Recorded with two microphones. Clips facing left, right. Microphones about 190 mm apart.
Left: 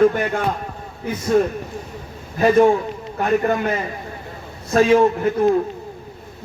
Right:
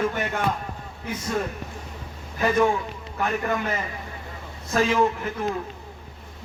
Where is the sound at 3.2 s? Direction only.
35° left (ahead or behind).